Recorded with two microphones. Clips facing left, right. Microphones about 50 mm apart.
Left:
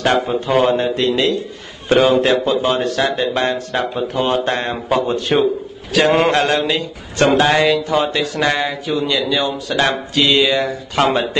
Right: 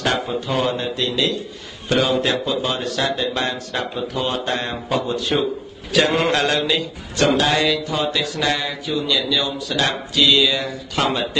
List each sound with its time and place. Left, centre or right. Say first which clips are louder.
0.0 s a man's voice: left 5 dB; left
6.1 s a man's voice: left 4 dB; left